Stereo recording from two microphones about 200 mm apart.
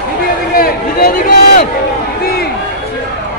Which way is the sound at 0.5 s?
50° left (ahead or behind).